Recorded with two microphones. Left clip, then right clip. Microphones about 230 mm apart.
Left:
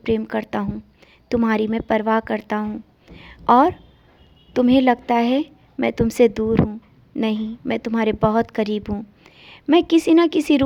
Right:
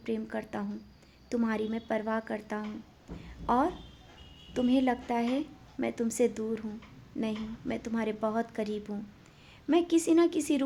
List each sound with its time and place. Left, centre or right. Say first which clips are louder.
0.0 s a woman's voice: left 13 dB; left